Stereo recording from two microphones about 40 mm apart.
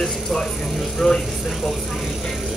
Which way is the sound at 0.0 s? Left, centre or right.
Centre.